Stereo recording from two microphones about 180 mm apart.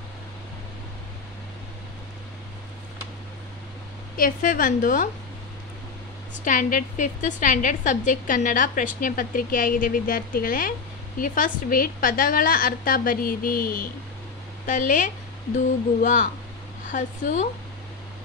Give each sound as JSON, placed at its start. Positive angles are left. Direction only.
{"t": 4.2, "sound": "a woman's voice", "side_deg": 50}
{"t": 6.4, "sound": "a woman's voice", "side_deg": 45}